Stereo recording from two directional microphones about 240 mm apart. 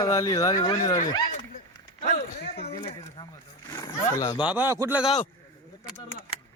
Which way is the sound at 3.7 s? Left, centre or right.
Centre.